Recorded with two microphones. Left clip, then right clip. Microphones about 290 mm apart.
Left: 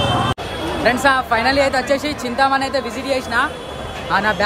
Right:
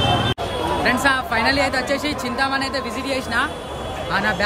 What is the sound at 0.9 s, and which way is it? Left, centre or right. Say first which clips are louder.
Speech: left 5 dB; centre.